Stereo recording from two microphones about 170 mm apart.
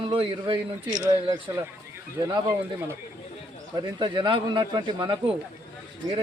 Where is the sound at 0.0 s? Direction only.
30° right (ahead or behind).